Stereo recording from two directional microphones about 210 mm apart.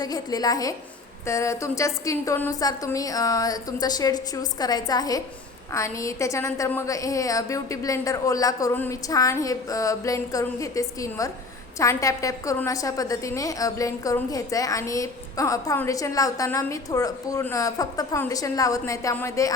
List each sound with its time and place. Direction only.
0.0 s a woman's voice: 20° left (ahead or behind)